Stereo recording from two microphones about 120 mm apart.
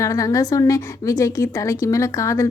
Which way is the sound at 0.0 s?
30° left (ahead or behind).